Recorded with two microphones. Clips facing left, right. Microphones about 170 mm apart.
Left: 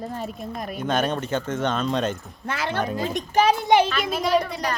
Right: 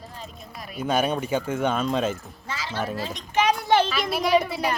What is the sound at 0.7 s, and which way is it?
Speech, 5° right (ahead or behind).